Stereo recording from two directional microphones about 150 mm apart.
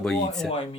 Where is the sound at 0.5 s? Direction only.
40° left (ahead or behind).